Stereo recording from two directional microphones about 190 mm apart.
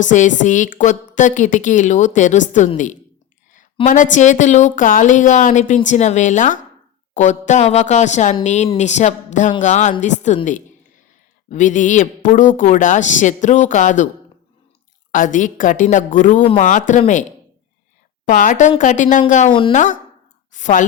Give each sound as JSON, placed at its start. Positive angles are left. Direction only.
{"t": 0.0, "sound": "a woman's voice", "side_deg": 40}
{"t": 15.1, "sound": "a woman's voice", "side_deg": 45}
{"t": 16.4, "sound": "a man's voice", "side_deg": 30}
{"t": 16.6, "sound": "a woman's voice", "side_deg": 40}
{"t": 18.3, "sound": "a woman's voice", "side_deg": 45}
{"t": 19.5, "sound": "a man's voice", "side_deg": 25}
{"t": 19.7, "sound": "a woman's voice", "side_deg": 40}
{"t": 20.5, "sound": "a sound", "side_deg": 40}